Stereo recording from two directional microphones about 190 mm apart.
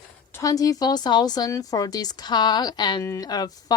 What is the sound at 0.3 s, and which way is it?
A woman's voice, 20° left (ahead or behind).